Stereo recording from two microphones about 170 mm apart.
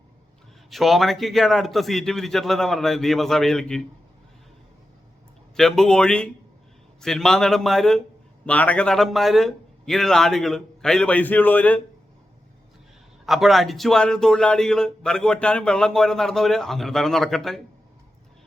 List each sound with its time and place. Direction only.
0.7 s speech: centre (ahead or behind)
5.5 s speech: 5° left (ahead or behind)
13.2 s speech: centre (ahead or behind)